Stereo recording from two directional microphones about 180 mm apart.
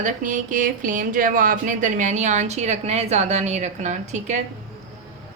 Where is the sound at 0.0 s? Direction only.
45° right (ahead or behind).